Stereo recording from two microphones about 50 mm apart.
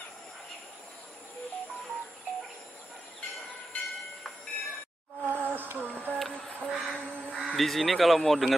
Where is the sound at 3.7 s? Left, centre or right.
Left.